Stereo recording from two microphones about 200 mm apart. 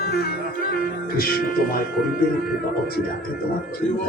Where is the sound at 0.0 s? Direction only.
50° left (ahead or behind).